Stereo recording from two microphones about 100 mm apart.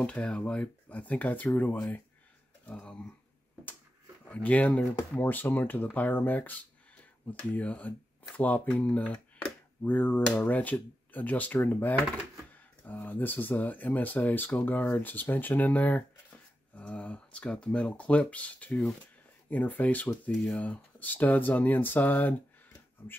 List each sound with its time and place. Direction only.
0.0 s speech: 10° left (ahead or behind)
4.2 s speech: 15° left (ahead or behind)